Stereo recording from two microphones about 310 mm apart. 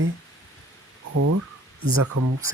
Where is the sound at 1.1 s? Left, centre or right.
Right.